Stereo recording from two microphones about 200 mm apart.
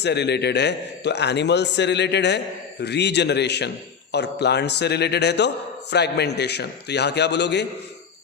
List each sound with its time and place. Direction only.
0.0 s a man's voice: 55° left (ahead or behind)